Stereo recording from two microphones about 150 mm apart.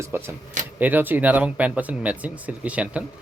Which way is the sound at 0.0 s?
15° right (ahead or behind).